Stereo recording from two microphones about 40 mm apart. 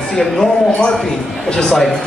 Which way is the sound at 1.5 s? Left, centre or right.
Centre.